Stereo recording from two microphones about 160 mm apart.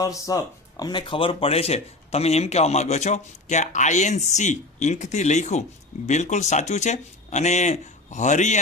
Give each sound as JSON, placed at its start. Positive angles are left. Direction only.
{"t": 0.0, "sound": "speech", "side_deg": 20}